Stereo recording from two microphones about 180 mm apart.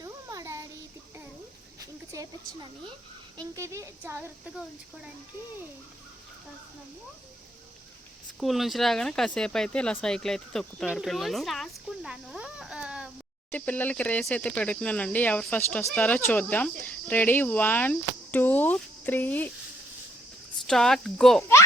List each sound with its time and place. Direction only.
0.0 s a sound: 20° right (ahead or behind)
3.3 s speech: 15° right (ahead or behind)
8.4 s speech: centre (ahead or behind)
13.5 s speech: 10° left (ahead or behind)
20.7 s speech: centre (ahead or behind)